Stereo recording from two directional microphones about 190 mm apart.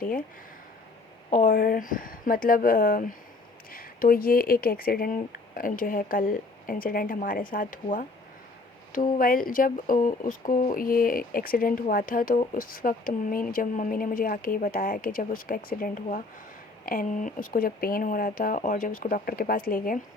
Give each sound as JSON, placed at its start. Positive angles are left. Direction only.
{"t": 1.3, "sound": "speech", "side_deg": 45}